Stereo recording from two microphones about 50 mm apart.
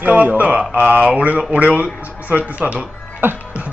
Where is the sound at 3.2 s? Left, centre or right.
Right.